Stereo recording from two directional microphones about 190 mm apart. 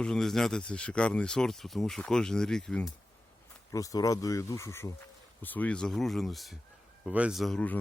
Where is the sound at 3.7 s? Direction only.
20° left (ahead or behind).